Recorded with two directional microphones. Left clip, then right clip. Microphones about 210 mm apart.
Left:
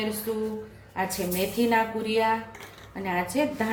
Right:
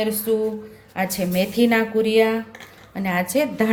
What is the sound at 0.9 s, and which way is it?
A woman's voice, 45° right (ahead or behind).